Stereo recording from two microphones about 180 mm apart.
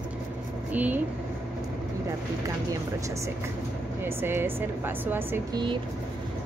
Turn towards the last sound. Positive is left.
turn(degrees=-10)  # may be behind; listen again after turning